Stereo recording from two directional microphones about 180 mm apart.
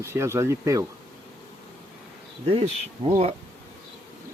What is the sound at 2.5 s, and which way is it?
Speech, 30° right (ahead or behind).